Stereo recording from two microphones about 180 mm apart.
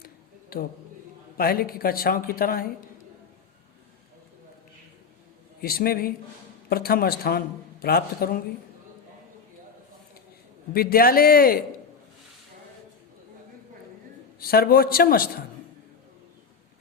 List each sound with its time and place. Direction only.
0.5 s a man's voice: 55° left (ahead or behind)
5.6 s a man's voice: 55° left (ahead or behind)
10.7 s a man's voice: 55° left (ahead or behind)
14.3 s a man's voice: 55° left (ahead or behind)